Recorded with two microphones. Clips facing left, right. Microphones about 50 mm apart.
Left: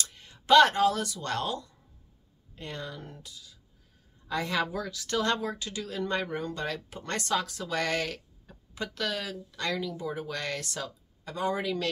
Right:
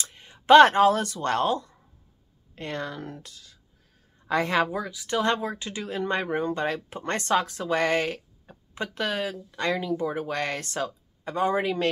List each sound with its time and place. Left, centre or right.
0.0 s speech: right
2.5 s speech: right
4.3 s speech: right
4.6 s speech: centre